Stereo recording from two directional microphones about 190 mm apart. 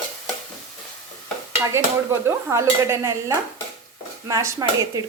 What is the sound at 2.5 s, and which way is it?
Speech, 15° right (ahead or behind).